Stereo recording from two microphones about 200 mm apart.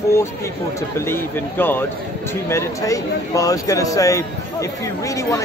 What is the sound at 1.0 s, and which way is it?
A man's voice, 10° left (ahead or behind).